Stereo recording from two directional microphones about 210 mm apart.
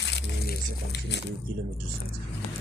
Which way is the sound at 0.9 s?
55° left (ahead or behind).